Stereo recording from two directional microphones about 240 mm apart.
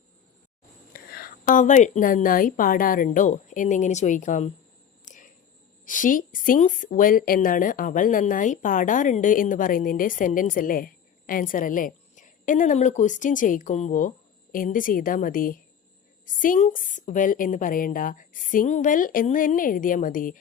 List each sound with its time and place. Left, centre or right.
0.9 s a woman's voice: left
5.0 s a sound: left
5.8 s a woman's voice: left